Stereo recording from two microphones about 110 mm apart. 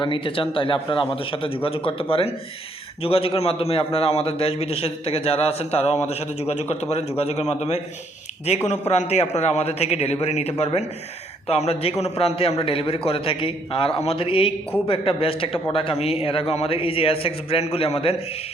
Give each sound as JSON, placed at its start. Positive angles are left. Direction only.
{"t": 0.0, "sound": "a man's voice", "side_deg": 50}